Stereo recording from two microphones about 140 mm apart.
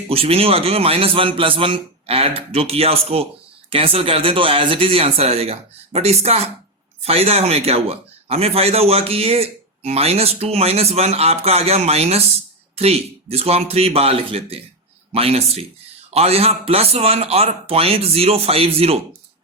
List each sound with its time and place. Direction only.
0.1 s speech: 45° right (ahead or behind)